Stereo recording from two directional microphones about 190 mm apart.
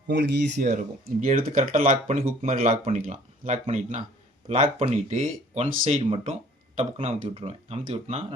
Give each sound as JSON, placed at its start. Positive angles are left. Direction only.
{"t": 0.1, "sound": "speech", "side_deg": -65}
{"t": 0.6, "sound": "speech", "side_deg": -45}